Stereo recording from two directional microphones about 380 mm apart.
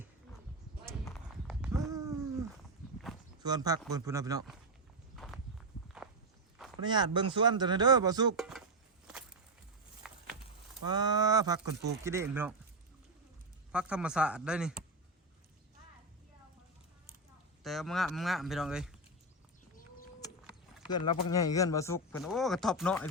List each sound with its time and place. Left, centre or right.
1.0 s clip-clop: centre
3.4 s speech: centre
5.1 s walk: centre
6.8 s speech: centre
8.4 s a sound: centre
10.0 s a sound: centre
10.8 s speech: centre
13.7 s speech: centre
17.6 s speech: centre
21.2 s speech: centre